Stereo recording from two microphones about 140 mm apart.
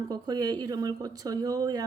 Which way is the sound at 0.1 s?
30° right (ahead or behind).